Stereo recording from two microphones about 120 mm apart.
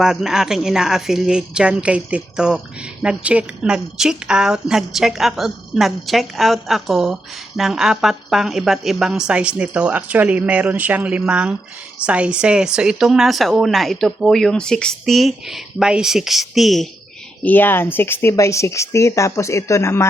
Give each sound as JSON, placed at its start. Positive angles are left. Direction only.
{"t": 0.0, "sound": "a woman's voice", "side_deg": -5}
{"t": 17.4, "sound": "speech", "side_deg": 15}